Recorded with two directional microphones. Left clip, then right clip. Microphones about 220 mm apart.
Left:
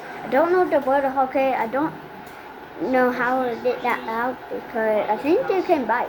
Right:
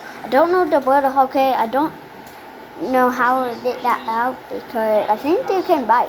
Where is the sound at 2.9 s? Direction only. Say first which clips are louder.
Right 4 dB; 5° right (ahead or behind).